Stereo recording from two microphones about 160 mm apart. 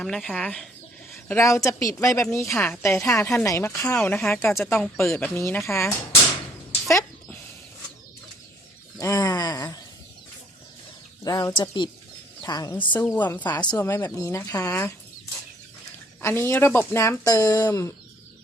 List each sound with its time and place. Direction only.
0.0 s speech: 5° left (ahead or behind)
1.3 s speech: 20° left (ahead or behind)
3.9 s speech: 5° left (ahead or behind)
6.8 s a sound: 15° left (ahead or behind)
9.0 s a sound: 20° left (ahead or behind)
11.2 s a woman's voice: 25° left (ahead or behind)
12.9 s speech: 10° left (ahead or behind)
13.4 s speech: 25° left (ahead or behind)
16.2 s speech: 15° left (ahead or behind)